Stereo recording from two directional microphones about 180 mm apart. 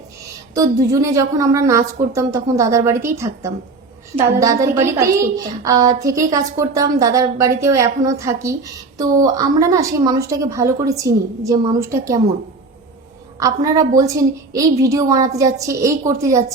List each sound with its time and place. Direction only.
0.5 s a woman's voice: 20° right (ahead or behind)
13.4 s a woman's voice: 20° right (ahead or behind)